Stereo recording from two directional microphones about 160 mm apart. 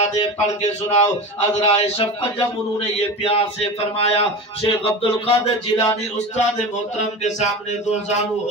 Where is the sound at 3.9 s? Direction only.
35° left (ahead or behind).